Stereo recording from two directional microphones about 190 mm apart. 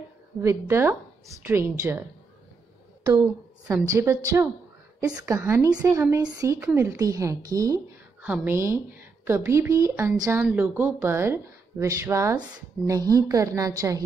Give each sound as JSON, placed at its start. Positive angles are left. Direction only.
{"t": 0.4, "sound": "speech", "side_deg": -15}
{"t": 3.6, "sound": "speech", "side_deg": -15}